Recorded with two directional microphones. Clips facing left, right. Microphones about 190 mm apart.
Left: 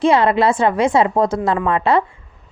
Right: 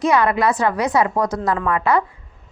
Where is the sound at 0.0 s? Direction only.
30° left (ahead or behind).